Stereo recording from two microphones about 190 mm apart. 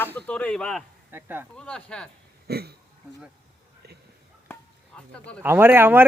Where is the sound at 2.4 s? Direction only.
55° right (ahead or behind).